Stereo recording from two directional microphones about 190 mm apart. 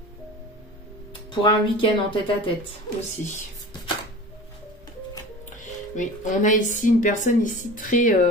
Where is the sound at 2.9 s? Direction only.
40° left (ahead or behind).